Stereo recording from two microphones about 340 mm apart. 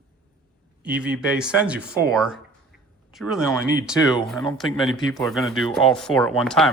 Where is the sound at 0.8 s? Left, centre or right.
Centre.